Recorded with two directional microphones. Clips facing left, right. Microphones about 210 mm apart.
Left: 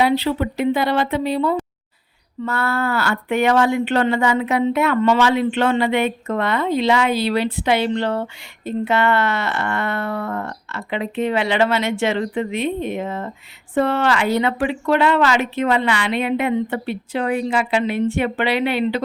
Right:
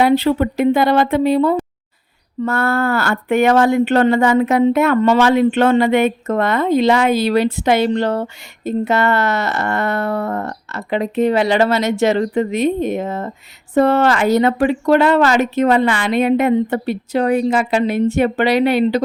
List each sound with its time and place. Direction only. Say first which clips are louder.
0.0 s speech: right 4 dB; 50° right (ahead or behind)